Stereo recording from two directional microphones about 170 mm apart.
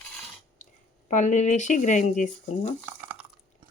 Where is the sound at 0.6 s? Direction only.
50° left (ahead or behind).